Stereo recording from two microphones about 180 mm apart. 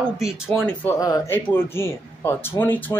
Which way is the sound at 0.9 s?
20° left (ahead or behind).